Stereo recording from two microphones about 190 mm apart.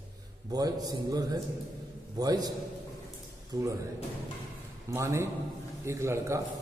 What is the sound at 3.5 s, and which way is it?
Speech, 15° right (ahead or behind).